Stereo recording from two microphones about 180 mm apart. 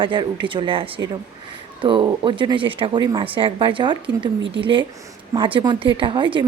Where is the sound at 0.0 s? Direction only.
25° right (ahead or behind).